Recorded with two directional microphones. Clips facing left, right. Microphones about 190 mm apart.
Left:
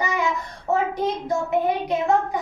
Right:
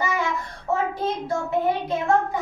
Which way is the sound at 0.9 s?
15° left (ahead or behind).